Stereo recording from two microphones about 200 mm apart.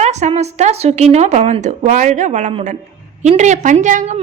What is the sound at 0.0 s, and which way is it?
A woman's voice, 35° right (ahead or behind).